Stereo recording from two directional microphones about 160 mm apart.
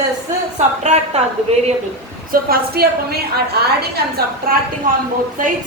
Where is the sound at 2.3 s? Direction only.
70° right (ahead or behind).